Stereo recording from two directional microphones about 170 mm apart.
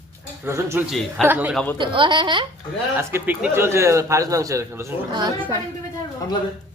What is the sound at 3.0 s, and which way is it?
A man's voice, 15° right (ahead or behind).